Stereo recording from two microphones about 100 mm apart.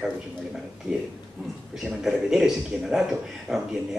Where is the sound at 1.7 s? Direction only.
5° right (ahead or behind).